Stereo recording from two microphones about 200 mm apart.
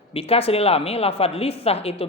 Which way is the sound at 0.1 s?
30° left (ahead or behind).